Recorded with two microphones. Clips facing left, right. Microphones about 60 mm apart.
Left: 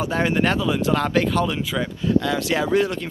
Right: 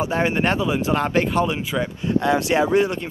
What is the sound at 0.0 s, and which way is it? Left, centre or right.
Speech, centre.